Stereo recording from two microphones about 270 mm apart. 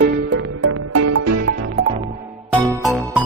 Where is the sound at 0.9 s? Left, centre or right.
Right.